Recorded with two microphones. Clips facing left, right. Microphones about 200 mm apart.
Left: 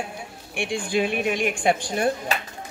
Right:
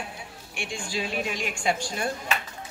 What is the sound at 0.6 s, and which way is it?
Speech, 55° left (ahead or behind).